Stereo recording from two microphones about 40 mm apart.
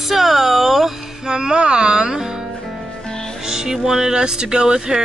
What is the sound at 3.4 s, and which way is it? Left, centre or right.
Speech, centre.